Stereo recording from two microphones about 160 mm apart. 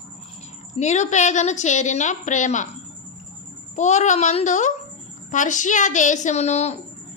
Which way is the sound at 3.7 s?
45° left (ahead or behind).